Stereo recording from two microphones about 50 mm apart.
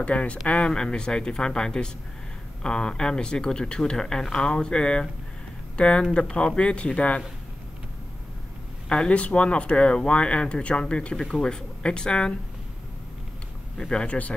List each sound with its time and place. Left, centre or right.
0.0 s speech: left
8.8 s speech: left
13.7 s speech: centre